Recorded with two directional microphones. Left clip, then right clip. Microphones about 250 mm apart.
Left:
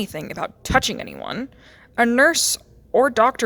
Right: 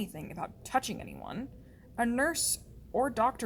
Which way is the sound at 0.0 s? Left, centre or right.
Left.